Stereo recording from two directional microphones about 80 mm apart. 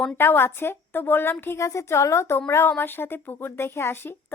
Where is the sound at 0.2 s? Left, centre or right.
Left.